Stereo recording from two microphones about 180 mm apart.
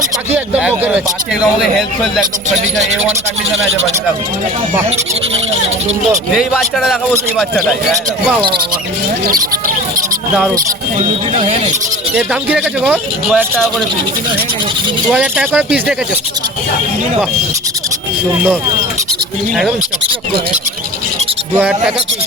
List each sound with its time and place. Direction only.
0.3 s speech: 10° right (ahead or behind)
6.3 s a man's voice: 5° right (ahead or behind)
8.4 s speech: 25° right (ahead or behind)
9.2 s speech: 55° right (ahead or behind)
11.3 s speech: 35° right (ahead or behind)
12.1 s speech: 5° right (ahead or behind)
15.1 s speech: 5° right (ahead or behind)
21.5 s a man's voice: 5° right (ahead or behind)